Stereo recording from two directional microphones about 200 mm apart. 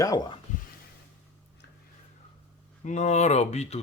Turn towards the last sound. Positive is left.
turn(degrees=35)  # may be behind; listen again after turning